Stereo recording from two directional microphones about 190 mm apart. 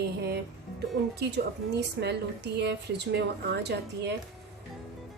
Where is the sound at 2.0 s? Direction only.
60° right (ahead or behind).